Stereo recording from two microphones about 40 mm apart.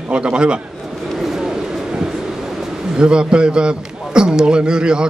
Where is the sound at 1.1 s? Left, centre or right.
Centre.